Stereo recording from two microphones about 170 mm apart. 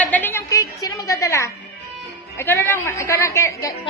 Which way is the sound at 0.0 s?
10° left (ahead or behind).